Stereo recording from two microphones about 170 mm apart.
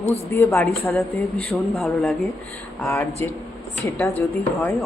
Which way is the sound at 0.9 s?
Centre (ahead or behind).